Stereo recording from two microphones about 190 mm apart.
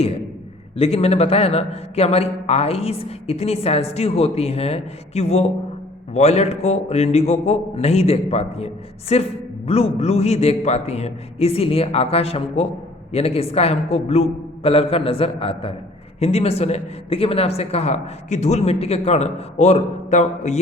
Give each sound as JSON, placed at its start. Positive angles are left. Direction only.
{"t": 0.8, "sound": "a man's voice", "side_deg": 30}